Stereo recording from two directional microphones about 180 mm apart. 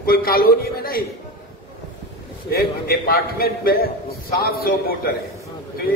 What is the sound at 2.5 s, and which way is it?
A man's voice, 60° left (ahead or behind).